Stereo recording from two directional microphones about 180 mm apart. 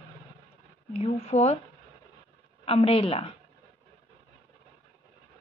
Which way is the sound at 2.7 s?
30° left (ahead or behind).